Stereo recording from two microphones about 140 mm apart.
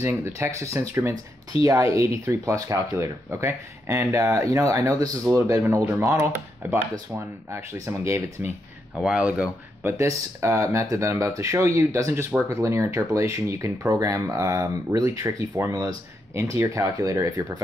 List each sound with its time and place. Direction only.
0.0 s speech: 20° right (ahead or behind)
9.0 s speech: 5° right (ahead or behind)
9.9 s speech: 20° right (ahead or behind)